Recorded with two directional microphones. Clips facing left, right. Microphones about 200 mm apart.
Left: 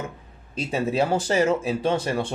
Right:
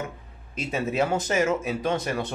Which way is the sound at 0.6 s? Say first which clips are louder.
Left 2 dB; 30° left (ahead or behind).